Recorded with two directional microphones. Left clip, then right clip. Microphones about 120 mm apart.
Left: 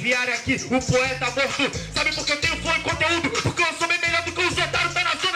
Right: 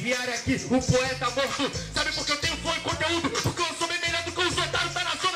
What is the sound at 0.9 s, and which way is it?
Speech, 20° right (ahead or behind).